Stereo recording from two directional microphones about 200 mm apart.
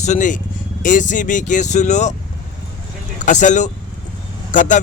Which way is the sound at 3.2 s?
35° left (ahead or behind).